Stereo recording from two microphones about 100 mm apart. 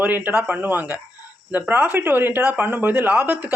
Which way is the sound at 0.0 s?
15° right (ahead or behind).